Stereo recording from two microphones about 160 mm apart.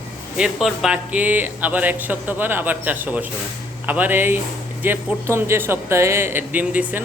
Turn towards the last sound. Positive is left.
turn(degrees=-10)  # may be behind; listen again after turning